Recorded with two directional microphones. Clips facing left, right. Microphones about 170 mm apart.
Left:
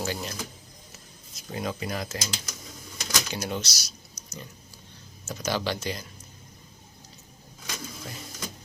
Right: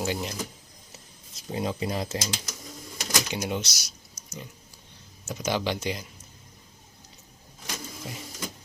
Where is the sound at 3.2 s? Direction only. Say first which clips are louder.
Right 2 dB; 15° right (ahead or behind).